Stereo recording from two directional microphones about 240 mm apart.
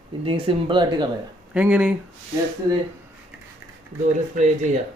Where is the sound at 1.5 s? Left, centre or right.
Centre.